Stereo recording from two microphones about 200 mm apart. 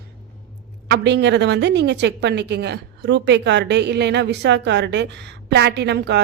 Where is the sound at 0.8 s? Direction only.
60° right (ahead or behind).